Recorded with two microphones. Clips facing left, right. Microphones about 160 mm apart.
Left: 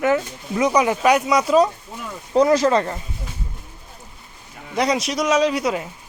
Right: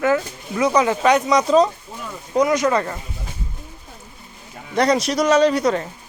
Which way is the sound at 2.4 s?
30° left (ahead or behind).